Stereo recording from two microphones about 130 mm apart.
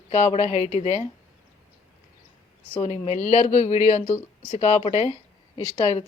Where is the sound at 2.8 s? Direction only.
60° left (ahead or behind).